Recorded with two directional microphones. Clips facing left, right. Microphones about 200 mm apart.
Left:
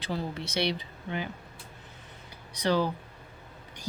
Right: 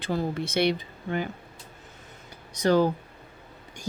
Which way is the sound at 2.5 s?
45° right (ahead or behind).